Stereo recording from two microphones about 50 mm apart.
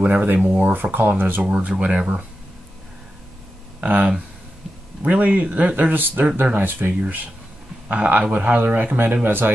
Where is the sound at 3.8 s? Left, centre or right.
Right.